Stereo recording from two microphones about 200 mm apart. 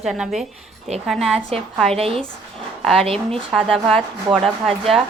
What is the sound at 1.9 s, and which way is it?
Speech, 30° right (ahead or behind).